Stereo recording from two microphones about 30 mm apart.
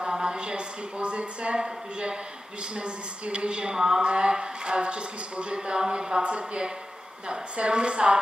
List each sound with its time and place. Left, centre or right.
0.0 s a man's voice: right
3.7 s a sound: centre
4.0 s a man's voice: right
6.2 s a man's voice: right